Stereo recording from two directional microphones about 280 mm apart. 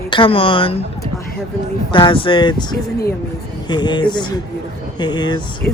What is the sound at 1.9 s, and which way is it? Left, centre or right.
Speech, centre.